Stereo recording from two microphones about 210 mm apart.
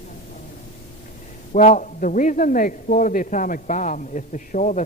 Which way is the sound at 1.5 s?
35° left (ahead or behind).